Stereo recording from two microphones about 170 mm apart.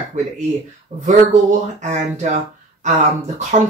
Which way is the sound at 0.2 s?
45° right (ahead or behind).